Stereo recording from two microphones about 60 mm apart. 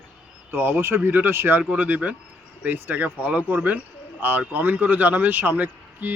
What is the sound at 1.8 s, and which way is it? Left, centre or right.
Speech, right.